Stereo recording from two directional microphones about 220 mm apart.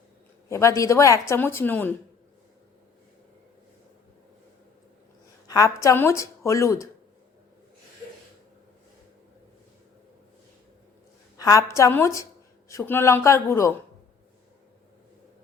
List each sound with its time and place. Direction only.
0.4 s a woman's voice: 15° left (ahead or behind)
5.5 s a woman's voice: 15° left (ahead or behind)
11.3 s a woman's voice: 15° left (ahead or behind)